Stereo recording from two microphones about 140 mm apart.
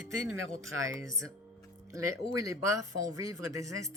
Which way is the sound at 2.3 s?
25° right (ahead or behind).